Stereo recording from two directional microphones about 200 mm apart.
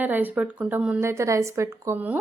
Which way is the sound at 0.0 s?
10° right (ahead or behind).